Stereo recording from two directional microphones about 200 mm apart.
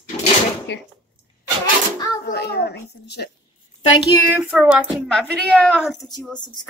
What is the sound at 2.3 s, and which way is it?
Speech, 55° left (ahead or behind).